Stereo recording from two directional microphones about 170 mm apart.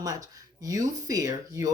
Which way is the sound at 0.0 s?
20° right (ahead or behind).